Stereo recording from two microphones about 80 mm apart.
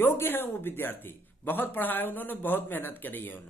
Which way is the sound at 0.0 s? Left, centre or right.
Left.